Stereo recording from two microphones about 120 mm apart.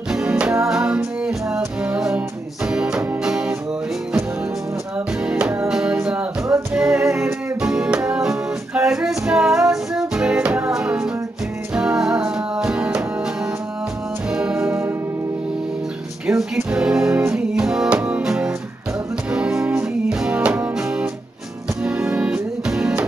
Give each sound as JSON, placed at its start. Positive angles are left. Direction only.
{"t": 0.1, "sound": "music", "side_deg": -5}
{"t": 4.9, "sound": "music", "side_deg": -10}
{"t": 14.3, "sound": "music", "side_deg": -5}
{"t": 16.3, "sound": "music", "side_deg": -5}